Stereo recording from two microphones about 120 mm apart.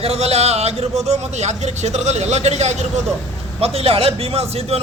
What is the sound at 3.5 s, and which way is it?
A man's voice, 55° right (ahead or behind).